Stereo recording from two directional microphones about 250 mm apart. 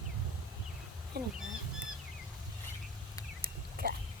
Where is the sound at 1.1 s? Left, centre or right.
Right.